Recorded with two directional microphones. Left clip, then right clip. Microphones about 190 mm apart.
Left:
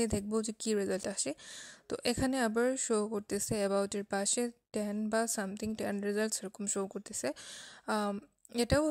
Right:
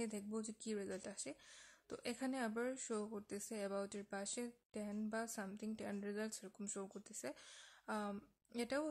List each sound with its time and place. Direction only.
0.0 s speech: 45° left (ahead or behind)